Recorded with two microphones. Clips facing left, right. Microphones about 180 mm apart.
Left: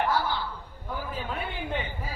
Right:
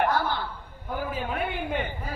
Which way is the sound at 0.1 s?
50° right (ahead or behind).